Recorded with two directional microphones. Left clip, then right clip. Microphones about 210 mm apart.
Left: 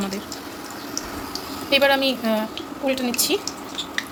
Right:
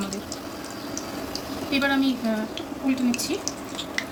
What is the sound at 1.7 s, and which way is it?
Speech, 40° left (ahead or behind).